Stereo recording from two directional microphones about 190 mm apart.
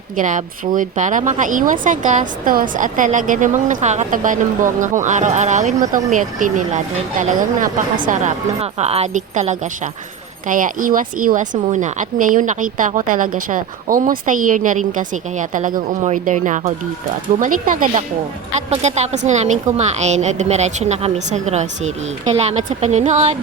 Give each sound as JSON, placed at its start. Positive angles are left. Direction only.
{"t": 0.2, "sound": "a woman's voice", "side_deg": -40}